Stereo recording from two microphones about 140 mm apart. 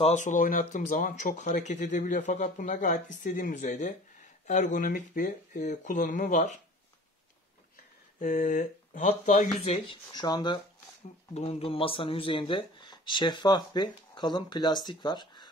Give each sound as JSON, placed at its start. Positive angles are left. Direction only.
{"t": 0.0, "sound": "speech", "side_deg": 55}
{"t": 8.2, "sound": "speech", "side_deg": 60}
{"t": 10.1, "sound": "speech", "side_deg": 30}